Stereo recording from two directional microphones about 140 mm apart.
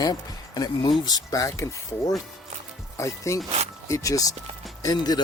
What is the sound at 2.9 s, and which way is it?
Speech, 20° left (ahead or behind).